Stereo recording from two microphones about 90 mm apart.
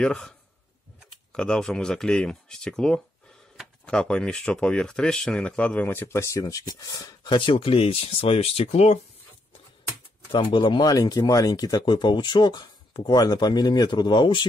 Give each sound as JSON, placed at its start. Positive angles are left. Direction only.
{"t": 0.0, "sound": "speech", "side_deg": 10}
{"t": 1.3, "sound": "speech", "side_deg": 10}
{"t": 7.2, "sound": "speech", "side_deg": 75}
{"t": 10.3, "sound": "speech", "side_deg": 65}
{"t": 10.8, "sound": "speech", "side_deg": 45}